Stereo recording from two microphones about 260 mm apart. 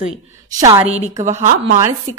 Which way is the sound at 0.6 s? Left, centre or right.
Centre.